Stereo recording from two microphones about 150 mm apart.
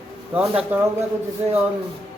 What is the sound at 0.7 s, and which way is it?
Speech, 10° right (ahead or behind).